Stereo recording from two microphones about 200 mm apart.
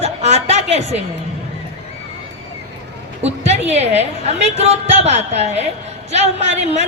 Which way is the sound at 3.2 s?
35° right (ahead or behind).